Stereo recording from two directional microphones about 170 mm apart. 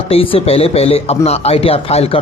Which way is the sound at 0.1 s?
35° left (ahead or behind).